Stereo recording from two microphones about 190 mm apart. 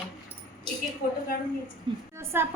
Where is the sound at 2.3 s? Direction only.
10° right (ahead or behind).